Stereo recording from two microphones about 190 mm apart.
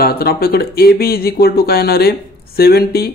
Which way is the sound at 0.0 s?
55° left (ahead or behind).